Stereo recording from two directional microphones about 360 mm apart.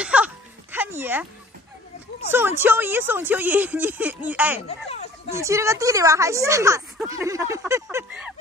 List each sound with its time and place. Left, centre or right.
0.0 s a sound: centre
2.3 s speech: centre
4.6 s speech: centre
5.3 s speech: centre